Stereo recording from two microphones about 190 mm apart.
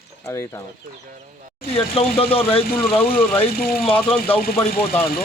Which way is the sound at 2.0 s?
30° left (ahead or behind).